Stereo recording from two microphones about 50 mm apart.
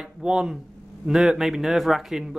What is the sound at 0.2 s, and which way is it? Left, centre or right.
A man's voice, centre.